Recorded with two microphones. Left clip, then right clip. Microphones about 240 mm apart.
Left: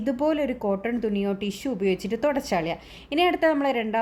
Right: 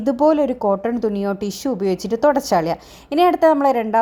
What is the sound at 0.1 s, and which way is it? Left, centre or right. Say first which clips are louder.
A woman's voice: right 9 dB; right.